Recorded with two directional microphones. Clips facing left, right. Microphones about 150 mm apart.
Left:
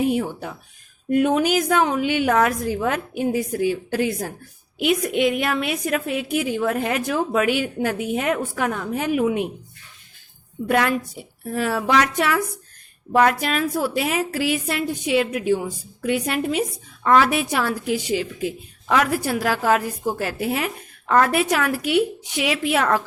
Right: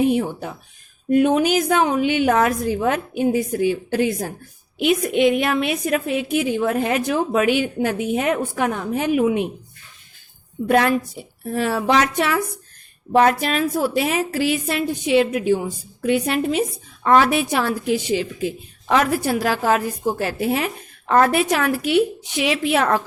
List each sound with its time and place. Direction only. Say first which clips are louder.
0.1 s a woman's voice: right 2 dB; 25° right (ahead or behind)
10.7 s a woman's voice: right 3 dB; 30° right (ahead or behind)